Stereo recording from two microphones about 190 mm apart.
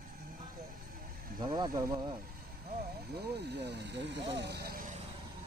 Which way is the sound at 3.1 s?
60° right (ahead or behind).